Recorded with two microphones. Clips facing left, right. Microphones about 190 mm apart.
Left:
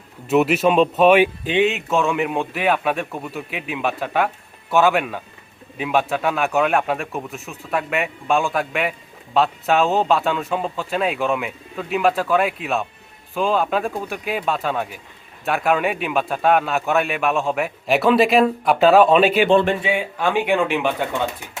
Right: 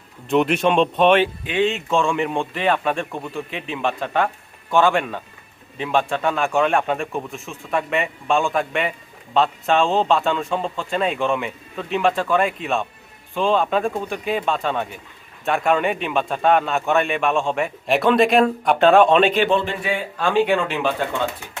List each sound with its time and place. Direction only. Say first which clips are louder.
0.3 s a man's voice: left 1 dB; 5° left (ahead or behind)